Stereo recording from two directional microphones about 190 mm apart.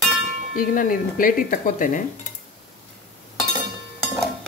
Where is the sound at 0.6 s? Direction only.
45° left (ahead or behind).